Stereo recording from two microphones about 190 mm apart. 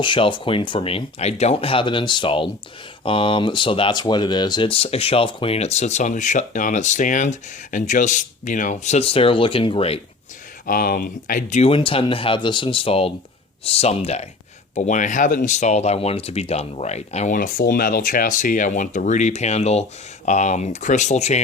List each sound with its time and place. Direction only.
0.0 s speech: 25° left (ahead or behind)
10.7 s speech: 45° left (ahead or behind)